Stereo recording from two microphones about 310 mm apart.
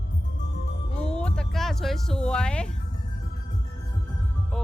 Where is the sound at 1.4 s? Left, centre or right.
Centre.